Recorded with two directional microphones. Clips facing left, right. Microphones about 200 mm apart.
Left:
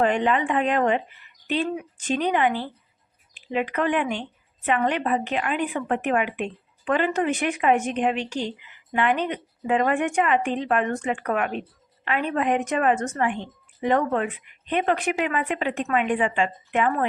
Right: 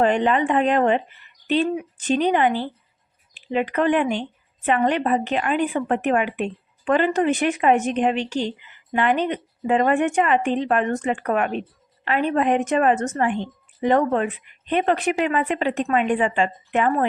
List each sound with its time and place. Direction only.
0.0 s speech: 35° right (ahead or behind)